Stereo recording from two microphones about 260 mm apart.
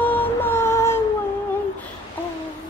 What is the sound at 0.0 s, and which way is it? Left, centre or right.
Music, centre.